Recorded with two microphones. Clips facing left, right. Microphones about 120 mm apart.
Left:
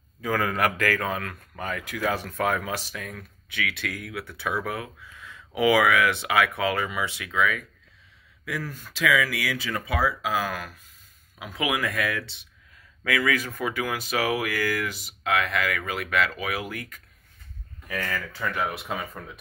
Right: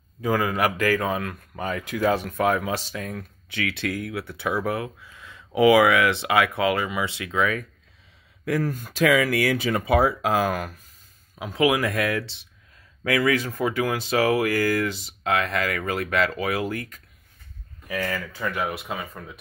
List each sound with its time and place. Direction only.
0.2 s speech: 15° right (ahead or behind); by 7.6 s 30° right (ahead or behind)
8.5 s speech: 45° right (ahead or behind)
11.3 s speech: 30° right (ahead or behind)
17.8 s speech: 10° right (ahead or behind)